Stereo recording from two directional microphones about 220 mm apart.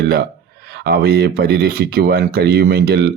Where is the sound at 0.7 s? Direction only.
45° right (ahead or behind).